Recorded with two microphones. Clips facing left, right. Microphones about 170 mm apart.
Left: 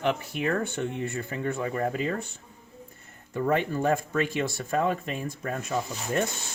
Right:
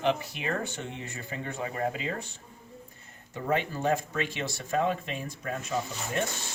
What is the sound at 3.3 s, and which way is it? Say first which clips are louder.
Speech: left 4 dB; 50° left (ahead or behind).